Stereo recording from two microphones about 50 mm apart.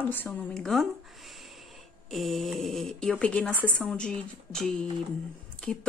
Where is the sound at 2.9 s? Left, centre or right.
Centre.